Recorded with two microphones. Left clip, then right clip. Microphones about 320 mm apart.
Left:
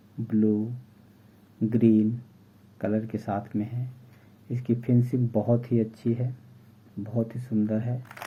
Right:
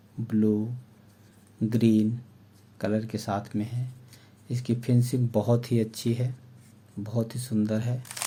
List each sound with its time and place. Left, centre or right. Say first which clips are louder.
0.3 s speech: left 1 dB; right
1.7 s speech: left 2 dB; right